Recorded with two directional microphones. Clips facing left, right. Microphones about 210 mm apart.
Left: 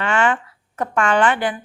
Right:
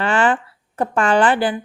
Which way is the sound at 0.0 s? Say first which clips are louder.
Right 2 dB; 35° right (ahead or behind).